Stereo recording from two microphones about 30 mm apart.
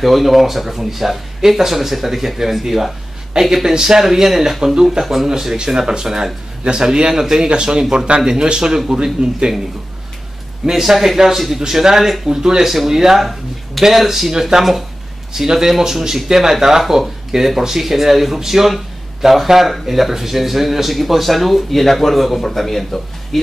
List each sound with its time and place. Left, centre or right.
0.0 s speech: centre
7.4 s speech: right
10.6 s speech: centre
11.6 s speech: centre
12.6 s speech: centre
13.2 s speech: centre
14.5 s speech: centre
16.8 s speech: centre